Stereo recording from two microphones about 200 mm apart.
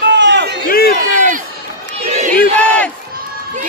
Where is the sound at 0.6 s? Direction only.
50° left (ahead or behind).